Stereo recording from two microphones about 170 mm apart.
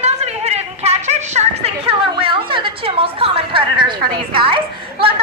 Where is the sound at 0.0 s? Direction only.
40° right (ahead or behind).